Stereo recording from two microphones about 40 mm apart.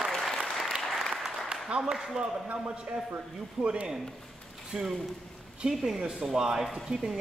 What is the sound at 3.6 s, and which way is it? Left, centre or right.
Speech, right.